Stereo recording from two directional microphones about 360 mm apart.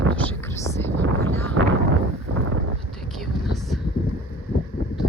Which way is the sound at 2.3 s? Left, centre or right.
Right.